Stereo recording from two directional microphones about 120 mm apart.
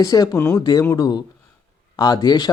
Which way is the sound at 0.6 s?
35° left (ahead or behind).